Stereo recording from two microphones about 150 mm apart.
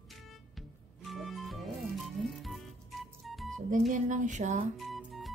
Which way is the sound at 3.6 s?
60° right (ahead or behind).